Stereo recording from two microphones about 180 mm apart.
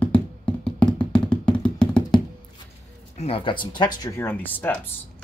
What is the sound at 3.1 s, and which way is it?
Speech, 35° left (ahead or behind).